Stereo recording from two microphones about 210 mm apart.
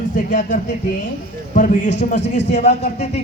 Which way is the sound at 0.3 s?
35° left (ahead or behind).